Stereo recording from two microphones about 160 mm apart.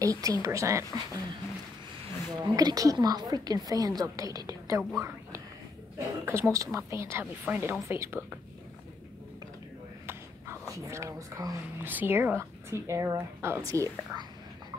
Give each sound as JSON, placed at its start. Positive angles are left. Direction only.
{"t": 0.0, "sound": "a woman's voice", "side_deg": -20}
{"t": 2.4, "sound": "a woman's voice", "side_deg": -25}
{"t": 5.9, "sound": "speech", "side_deg": -15}
{"t": 10.7, "sound": "speech", "side_deg": -20}